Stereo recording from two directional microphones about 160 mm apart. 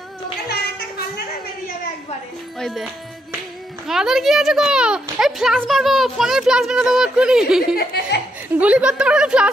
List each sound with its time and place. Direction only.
0.5 s a sound: 80° left
2.6 s speech: 5° right (ahead or behind)
7.7 s speech: 90° left
8.5 s a woman's voice: 10° right (ahead or behind)